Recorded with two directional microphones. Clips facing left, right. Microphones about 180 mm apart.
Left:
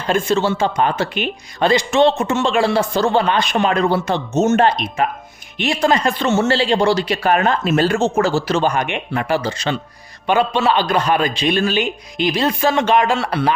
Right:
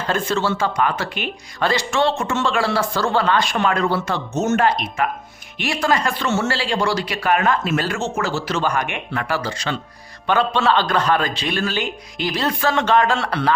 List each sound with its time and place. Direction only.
0.1 s a man's voice: 15° left (ahead or behind)